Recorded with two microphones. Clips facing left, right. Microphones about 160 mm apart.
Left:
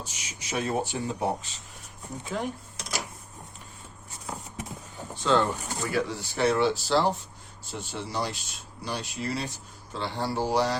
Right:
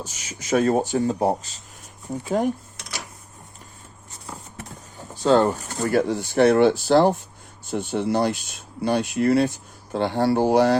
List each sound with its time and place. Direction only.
0.0 s speech: 45° right (ahead or behind)
4.3 s vehicle: 15° left (ahead or behind)
5.2 s speech: 40° right (ahead or behind)